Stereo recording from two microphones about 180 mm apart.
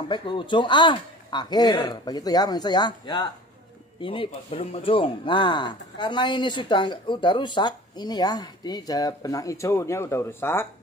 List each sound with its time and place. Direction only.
0.1 s a man's voice: 25° left (ahead or behind)